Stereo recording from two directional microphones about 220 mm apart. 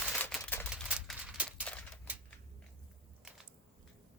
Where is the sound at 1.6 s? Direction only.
5° left (ahead or behind).